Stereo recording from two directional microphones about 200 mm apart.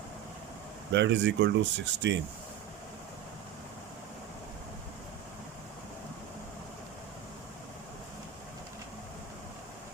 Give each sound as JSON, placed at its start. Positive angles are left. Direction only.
{"t": 0.9, "sound": "speech", "side_deg": -60}